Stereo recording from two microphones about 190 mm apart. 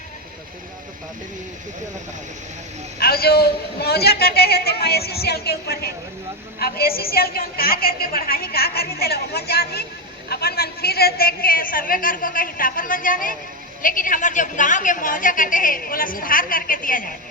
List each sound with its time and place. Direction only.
3.0 s a man's voice: 55° left (ahead or behind)